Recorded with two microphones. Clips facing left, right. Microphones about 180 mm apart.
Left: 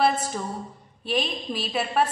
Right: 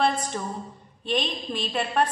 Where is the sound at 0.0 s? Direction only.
5° left (ahead or behind).